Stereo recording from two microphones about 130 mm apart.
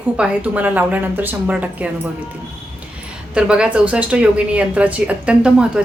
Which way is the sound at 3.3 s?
5° right (ahead or behind).